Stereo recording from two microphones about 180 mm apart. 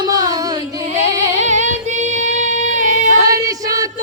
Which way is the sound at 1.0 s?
40° right (ahead or behind).